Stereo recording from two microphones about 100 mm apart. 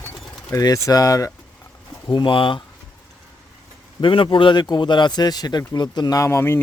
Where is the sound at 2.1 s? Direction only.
55° left (ahead or behind).